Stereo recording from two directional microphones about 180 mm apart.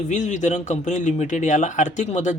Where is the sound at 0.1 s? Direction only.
40° left (ahead or behind).